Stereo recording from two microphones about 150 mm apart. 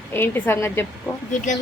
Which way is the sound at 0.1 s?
15° left (ahead or behind).